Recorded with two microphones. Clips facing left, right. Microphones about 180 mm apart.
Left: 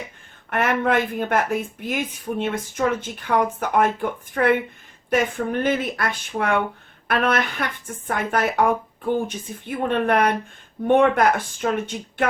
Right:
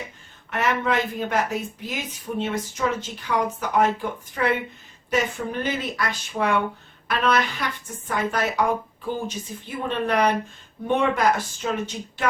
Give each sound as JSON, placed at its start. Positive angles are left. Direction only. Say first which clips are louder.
{"t": 0.5, "sound": "a woman's voice", "louder": "left 3 dB", "side_deg": 55}